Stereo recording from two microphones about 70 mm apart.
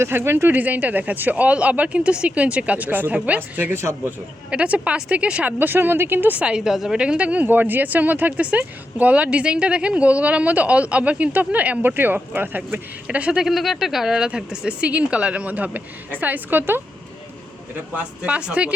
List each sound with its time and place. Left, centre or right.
0.0 s speech: right
3.7 s speech: right
4.5 s speech: centre
6.4 s speech: centre; by 12.8 s right
13.1 s speech: centre
13.4 s speech: centre; by 16.8 s right
17.9 s speech: centre